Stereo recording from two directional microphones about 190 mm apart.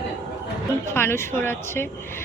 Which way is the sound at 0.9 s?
10° left (ahead or behind).